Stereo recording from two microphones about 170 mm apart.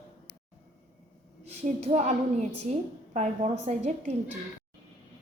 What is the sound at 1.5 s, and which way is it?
A woman's voice, 40° right (ahead or behind).